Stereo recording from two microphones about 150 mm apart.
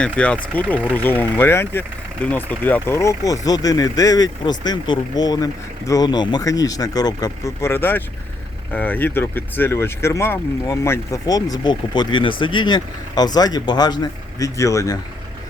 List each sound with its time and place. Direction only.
0.0 s speech: 10° left (ahead or behind)